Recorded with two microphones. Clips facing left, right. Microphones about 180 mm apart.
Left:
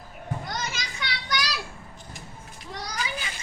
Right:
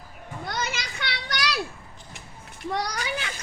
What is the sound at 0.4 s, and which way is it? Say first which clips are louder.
Children playing: right 2 dB; 65° right (ahead or behind).